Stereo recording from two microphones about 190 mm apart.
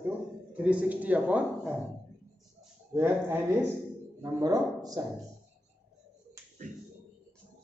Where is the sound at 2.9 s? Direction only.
15° right (ahead or behind).